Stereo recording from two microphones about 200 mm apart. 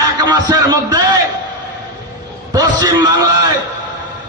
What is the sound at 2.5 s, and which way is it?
A man's voice, 20° right (ahead or behind).